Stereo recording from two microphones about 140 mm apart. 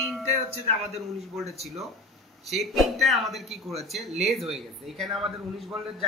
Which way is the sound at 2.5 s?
Centre (ahead or behind).